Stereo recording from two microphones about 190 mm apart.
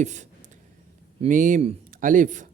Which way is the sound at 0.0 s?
40° right (ahead or behind).